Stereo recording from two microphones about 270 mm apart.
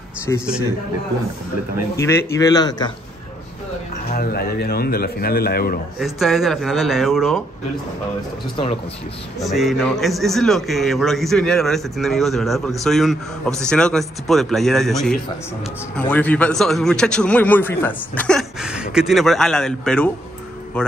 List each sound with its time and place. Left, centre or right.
0.3 s speech: centre
2.0 s speech: centre
4.1 s a man's voice: left
5.9 s a man's voice: centre
9.4 s a man's voice: centre